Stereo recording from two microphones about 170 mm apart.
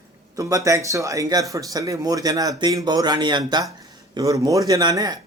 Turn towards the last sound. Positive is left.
turn(degrees=-20)  # may be behind; listen again after turning